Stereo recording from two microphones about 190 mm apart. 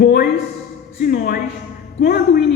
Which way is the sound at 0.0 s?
55° left (ahead or behind).